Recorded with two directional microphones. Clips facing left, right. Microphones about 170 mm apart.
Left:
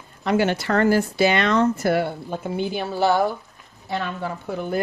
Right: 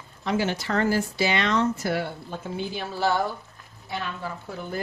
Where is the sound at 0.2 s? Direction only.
65° left (ahead or behind).